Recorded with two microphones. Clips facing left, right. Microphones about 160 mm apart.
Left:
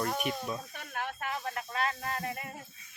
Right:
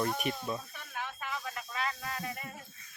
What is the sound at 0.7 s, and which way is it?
Snake, 55° left (ahead or behind).